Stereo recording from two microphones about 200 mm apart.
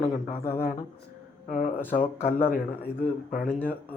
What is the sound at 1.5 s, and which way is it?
Speech, 40° left (ahead or behind).